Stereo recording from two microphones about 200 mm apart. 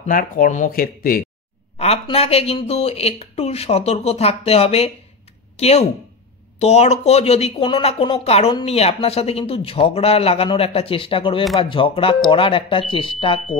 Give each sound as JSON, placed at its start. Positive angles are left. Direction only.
{"t": 0.0, "sound": "speech", "side_deg": 45}
{"t": 1.8, "sound": "speech", "side_deg": 30}